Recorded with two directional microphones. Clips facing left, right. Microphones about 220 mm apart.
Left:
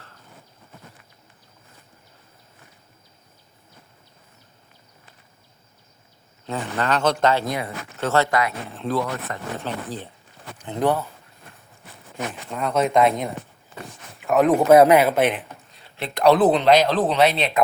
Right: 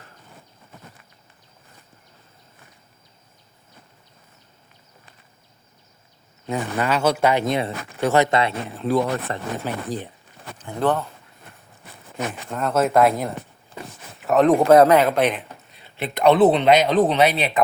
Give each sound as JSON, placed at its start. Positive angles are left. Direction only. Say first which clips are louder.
{"t": 6.4, "sound": "a man's voice", "louder": "right 2 dB", "side_deg": -15}
{"t": 7.9, "sound": "a man's voice", "louder": "right 2 dB", "side_deg": -15}
{"t": 8.7, "sound": "a man's voice", "louder": "right 4 dB", "side_deg": -10}
{"t": 9.0, "sound": "speech", "louder": "right 5 dB", "side_deg": -30}
{"t": 9.6, "sound": "a man's voice", "louder": "right 3 dB", "side_deg": -15}
{"t": 10.6, "sound": "speech", "louder": "even", "side_deg": 15}
{"t": 12.3, "sound": "speech", "louder": "right 1 dB", "side_deg": 0}
{"t": 13.9, "sound": "a sound", "louder": "right 1 dB", "side_deg": 0}
{"t": 14.6, "sound": "speech", "louder": "left 2 dB", "side_deg": 10}
{"t": 16.0, "sound": "a man's voice", "louder": "right 1 dB", "side_deg": -5}